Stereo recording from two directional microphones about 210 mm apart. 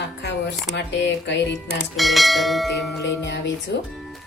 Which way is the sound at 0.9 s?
60° left (ahead or behind).